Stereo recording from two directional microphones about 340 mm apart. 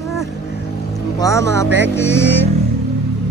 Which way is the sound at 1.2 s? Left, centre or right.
Centre.